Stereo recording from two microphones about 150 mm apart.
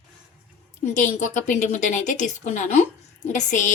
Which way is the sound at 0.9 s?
60° left (ahead or behind).